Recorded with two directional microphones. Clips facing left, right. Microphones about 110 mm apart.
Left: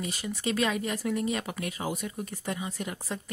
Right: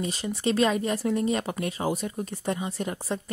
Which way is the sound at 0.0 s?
35° right (ahead or behind).